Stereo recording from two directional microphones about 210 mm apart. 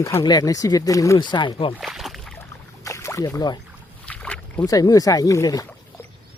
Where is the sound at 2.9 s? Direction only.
15° left (ahead or behind).